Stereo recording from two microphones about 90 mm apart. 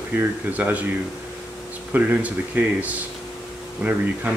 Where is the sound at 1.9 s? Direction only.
15° right (ahead or behind).